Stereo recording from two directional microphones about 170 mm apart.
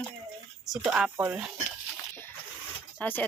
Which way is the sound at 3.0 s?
10° left (ahead or behind).